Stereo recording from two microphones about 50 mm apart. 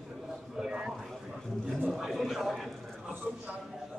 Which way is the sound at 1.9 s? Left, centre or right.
Centre.